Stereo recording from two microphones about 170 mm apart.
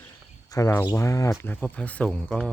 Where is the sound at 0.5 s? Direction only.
15° left (ahead or behind).